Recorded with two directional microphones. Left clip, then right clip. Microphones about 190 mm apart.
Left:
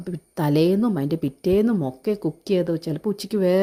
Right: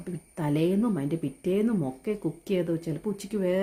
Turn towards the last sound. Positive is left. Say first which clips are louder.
# left 7 dB
turn(degrees=40)  # may be behind; listen again after turning